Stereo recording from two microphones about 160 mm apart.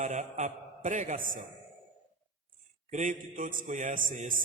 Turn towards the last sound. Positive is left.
turn(degrees=-55)  # may be behind; listen again after turning